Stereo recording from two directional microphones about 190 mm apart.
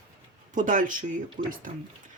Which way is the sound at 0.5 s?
45° right (ahead or behind).